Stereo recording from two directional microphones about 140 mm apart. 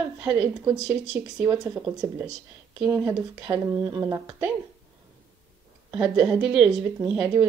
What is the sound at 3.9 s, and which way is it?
Speech, 25° right (ahead or behind).